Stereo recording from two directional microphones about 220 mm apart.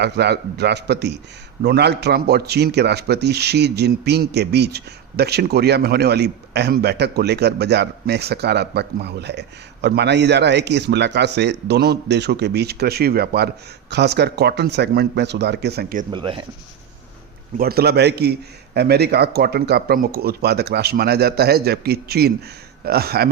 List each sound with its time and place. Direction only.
0.0 s a man's voice: 50° right (ahead or behind)
16.1 s speech: 20° right (ahead or behind)
17.6 s a man's voice: 45° right (ahead or behind)